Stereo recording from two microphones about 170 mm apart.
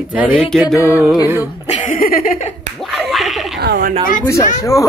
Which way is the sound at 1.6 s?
50° left (ahead or behind).